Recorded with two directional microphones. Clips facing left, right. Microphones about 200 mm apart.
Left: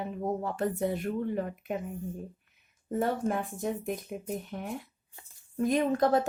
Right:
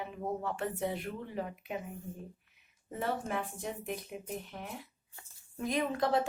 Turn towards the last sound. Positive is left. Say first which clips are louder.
# left 5 dB
turn(degrees=45)  # may be behind; listen again after turning